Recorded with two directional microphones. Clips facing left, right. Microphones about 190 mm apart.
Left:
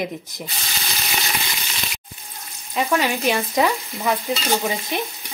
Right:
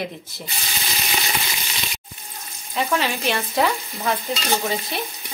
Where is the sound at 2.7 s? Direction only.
10° left (ahead or behind).